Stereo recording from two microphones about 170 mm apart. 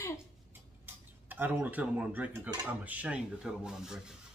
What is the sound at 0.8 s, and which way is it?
Speech, 10° right (ahead or behind).